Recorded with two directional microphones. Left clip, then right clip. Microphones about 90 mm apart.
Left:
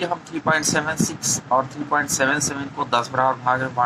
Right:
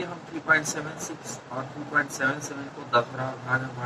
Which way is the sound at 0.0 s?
30° left (ahead or behind).